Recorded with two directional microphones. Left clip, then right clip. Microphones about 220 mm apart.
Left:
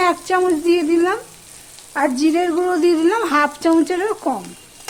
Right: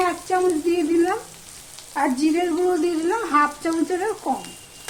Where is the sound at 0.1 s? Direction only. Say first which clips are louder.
Left 4 dB; 55° left (ahead or behind).